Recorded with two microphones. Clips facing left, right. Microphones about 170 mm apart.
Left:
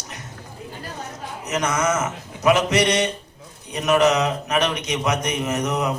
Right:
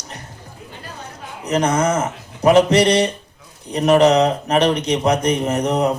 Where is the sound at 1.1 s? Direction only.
30° right (ahead or behind).